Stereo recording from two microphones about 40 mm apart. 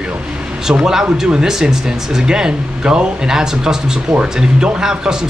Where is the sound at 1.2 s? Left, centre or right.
Centre.